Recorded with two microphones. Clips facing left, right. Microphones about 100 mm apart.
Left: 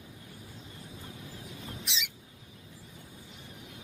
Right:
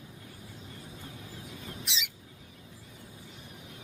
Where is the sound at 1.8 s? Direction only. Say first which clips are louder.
Even; centre (ahead or behind).